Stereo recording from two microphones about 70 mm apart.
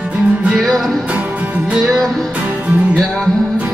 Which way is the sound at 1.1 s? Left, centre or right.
Right.